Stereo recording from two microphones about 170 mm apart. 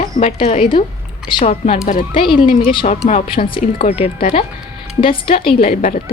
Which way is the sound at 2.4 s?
30° left (ahead or behind).